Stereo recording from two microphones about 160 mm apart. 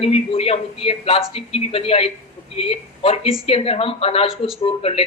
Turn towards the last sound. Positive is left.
turn(degrees=35)  # may be behind; listen again after turning